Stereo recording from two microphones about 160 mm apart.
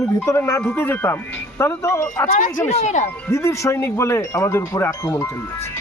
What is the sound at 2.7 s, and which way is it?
Speech, 45° left (ahead or behind).